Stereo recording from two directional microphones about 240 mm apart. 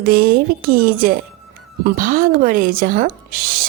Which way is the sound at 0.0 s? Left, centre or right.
Right.